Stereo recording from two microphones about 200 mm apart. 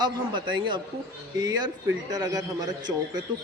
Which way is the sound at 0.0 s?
25° right (ahead or behind).